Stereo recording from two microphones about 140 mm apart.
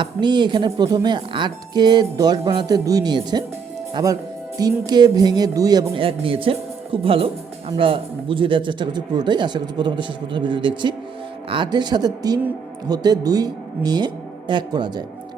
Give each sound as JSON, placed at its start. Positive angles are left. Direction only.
{"t": 0.0, "sound": "speech", "side_deg": -30}
{"t": 5.9, "sound": "speech", "side_deg": -40}